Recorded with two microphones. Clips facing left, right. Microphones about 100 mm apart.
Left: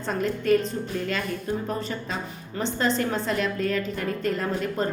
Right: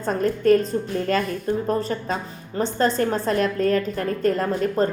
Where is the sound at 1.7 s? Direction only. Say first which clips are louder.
Right 6 dB; 40° right (ahead or behind).